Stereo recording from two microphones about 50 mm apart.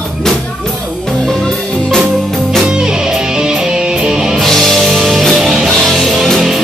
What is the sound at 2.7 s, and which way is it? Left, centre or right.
Music, centre.